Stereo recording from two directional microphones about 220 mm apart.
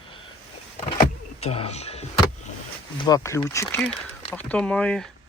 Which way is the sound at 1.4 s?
30° left (ahead or behind).